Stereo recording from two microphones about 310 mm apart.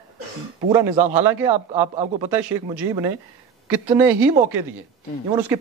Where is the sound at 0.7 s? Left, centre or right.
Centre.